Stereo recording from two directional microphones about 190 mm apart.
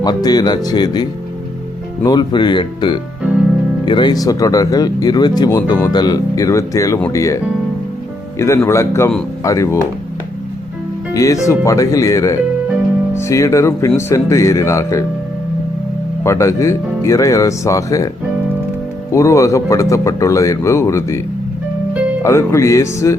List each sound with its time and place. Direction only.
0.0 s speech: 20° left (ahead or behind)
2.0 s speech: 25° left (ahead or behind)
8.4 s speech: 15° left (ahead or behind)
11.1 s speech: 15° left (ahead or behind)
16.2 s speech: 15° left (ahead or behind)
19.1 s speech: 15° left (ahead or behind)
22.2 s speech: 15° left (ahead or behind)